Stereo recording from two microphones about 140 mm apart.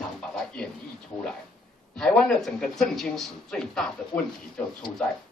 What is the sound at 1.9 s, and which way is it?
A man's voice, 5° left (ahead or behind).